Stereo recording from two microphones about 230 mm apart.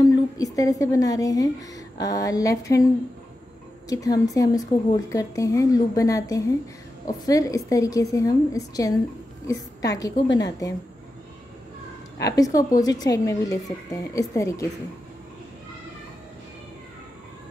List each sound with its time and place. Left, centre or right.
0.0 s a woman's voice: centre
3.9 s a woman's voice: centre
10.2 s a woman's voice: left
12.2 s a woman's voice: centre